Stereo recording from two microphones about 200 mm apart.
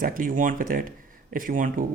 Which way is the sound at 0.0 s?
45° right (ahead or behind).